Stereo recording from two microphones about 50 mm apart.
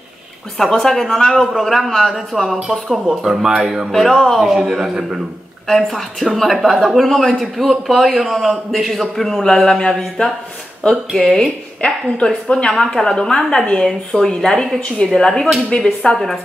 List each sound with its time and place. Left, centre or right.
0.6 s a man's voice: centre
3.9 s a man's voice: centre
4.4 s speech: centre
5.7 s a man's voice: centre
7.1 s a man's voice: centre